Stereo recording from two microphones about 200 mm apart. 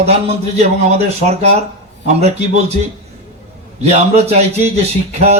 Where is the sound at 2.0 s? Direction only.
35° right (ahead or behind).